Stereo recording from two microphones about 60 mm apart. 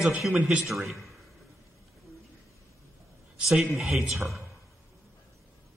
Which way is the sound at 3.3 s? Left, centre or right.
Centre.